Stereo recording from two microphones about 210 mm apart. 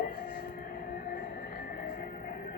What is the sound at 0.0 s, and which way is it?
Music, 40° left (ahead or behind).